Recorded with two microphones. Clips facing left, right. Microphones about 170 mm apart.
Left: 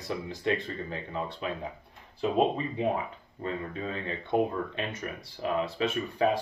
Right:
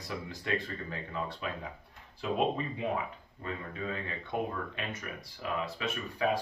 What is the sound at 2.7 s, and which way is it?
Speech, 30° left (ahead or behind).